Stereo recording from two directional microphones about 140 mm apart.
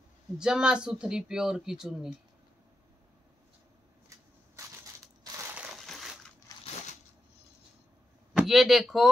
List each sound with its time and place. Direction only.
0.4 s speech: 5° right (ahead or behind)
5.5 s crushing: 10° right (ahead or behind)
6.6 s a sound: 50° left (ahead or behind)
8.4 s speech: centre (ahead or behind)